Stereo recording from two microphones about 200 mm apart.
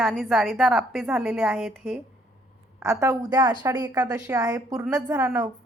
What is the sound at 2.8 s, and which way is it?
A woman's voice, 15° right (ahead or behind).